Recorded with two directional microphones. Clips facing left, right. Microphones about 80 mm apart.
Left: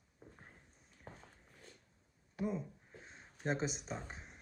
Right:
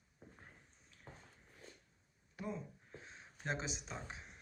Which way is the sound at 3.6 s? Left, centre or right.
Left.